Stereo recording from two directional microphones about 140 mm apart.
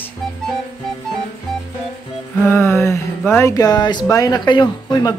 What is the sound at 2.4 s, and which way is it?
Music, 20° left (ahead or behind).